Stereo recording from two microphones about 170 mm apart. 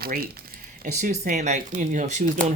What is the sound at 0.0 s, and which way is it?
Speech, 60° right (ahead or behind).